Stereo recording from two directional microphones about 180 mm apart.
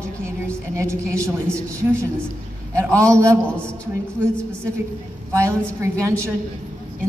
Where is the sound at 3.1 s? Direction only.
15° right (ahead or behind).